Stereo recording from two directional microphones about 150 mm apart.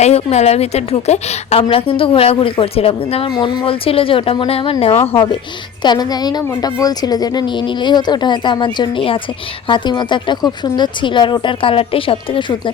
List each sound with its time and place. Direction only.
0.0 s a woman's voice: 45° left (ahead or behind)
4.9 s speech: 15° left (ahead or behind)
5.8 s a woman's voice: 30° left (ahead or behind)